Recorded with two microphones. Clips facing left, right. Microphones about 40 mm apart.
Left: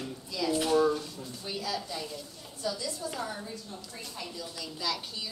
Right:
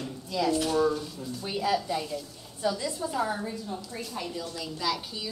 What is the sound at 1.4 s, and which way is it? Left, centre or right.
Speech, right.